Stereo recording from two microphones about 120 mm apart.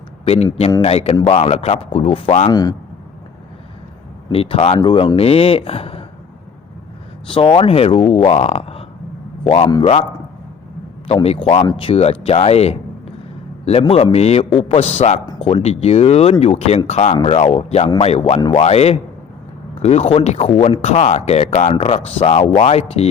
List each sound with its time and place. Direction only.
0.8 s a man's voice: 55° left (ahead or behind)
2.5 s speech: 30° left (ahead or behind)
4.3 s speech: 55° left (ahead or behind)
4.8 s speech: 40° left (ahead or behind)
7.3 s a man's voice: 50° left (ahead or behind)
11.1 s a man's voice: 55° left (ahead or behind)
15.4 s a man's voice: 55° left (ahead or behind); by 17.2 s 70° left (ahead or behind)
17.2 s a man's voice: 55° left (ahead or behind)
18.3 s speech: 35° left (ahead or behind)
18.6 s a man's voice: 60° left (ahead or behind)